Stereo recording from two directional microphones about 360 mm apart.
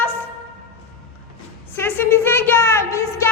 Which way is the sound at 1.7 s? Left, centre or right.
Centre.